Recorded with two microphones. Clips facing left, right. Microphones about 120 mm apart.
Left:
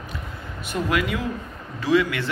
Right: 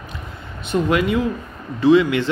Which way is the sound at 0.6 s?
25° right (ahead or behind).